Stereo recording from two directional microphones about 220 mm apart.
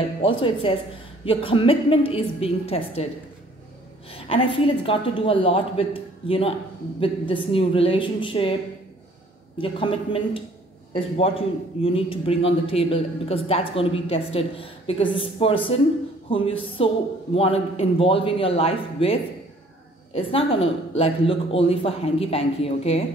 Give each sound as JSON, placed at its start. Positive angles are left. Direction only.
{"t": 0.4, "sound": "a woman's voice", "side_deg": 25}
{"t": 4.1, "sound": "a woman's voice", "side_deg": 25}
{"t": 9.6, "sound": "a woman's voice", "side_deg": 25}